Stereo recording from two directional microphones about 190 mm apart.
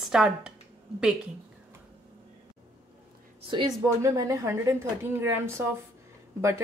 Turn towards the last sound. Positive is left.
turn(degrees=-15)  # may be behind; listen again after turning